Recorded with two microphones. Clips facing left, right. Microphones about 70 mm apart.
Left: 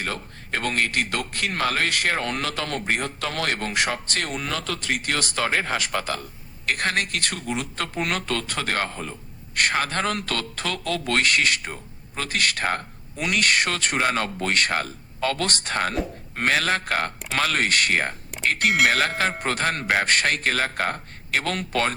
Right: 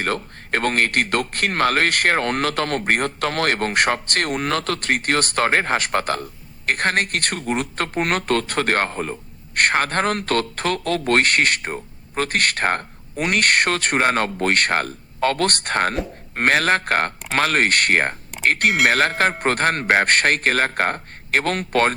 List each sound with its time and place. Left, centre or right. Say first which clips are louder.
0.0 s speech: right 6 dB; right